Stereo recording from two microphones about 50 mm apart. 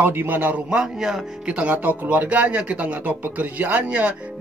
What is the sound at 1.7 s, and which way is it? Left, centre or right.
Speech, right.